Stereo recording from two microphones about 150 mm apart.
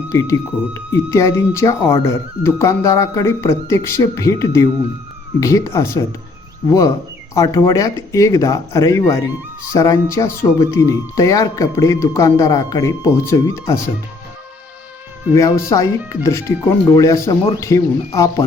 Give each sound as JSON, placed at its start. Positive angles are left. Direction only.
{"t": 0.1, "sound": "speech", "side_deg": 20}
{"t": 15.3, "sound": "speech", "side_deg": 20}